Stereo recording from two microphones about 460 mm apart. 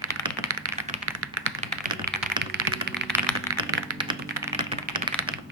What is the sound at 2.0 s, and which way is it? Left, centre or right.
Typing, centre.